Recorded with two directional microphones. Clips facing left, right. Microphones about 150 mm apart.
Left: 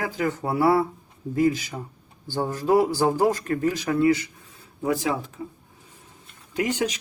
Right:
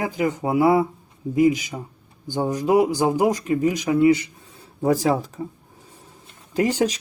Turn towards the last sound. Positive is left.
turn(degrees=-35)  # may be behind; listen again after turning